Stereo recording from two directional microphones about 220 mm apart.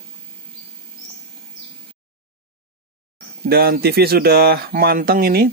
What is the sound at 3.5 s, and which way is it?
Speech, 45° right (ahead or behind).